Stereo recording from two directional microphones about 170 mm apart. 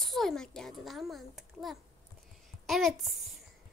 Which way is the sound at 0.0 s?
Centre (ahead or behind).